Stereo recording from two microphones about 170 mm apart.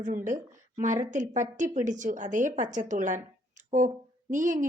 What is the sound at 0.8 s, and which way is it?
Speech, 45° right (ahead or behind).